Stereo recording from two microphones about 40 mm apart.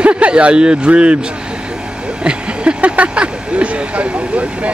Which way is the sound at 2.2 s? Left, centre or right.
Right.